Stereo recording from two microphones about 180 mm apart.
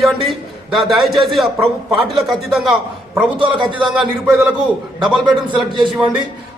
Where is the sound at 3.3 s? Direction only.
30° right (ahead or behind).